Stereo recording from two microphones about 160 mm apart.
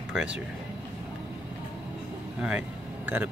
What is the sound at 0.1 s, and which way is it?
Speech, 5° right (ahead or behind).